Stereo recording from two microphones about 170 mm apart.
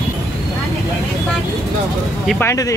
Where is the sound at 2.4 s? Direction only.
15° left (ahead or behind).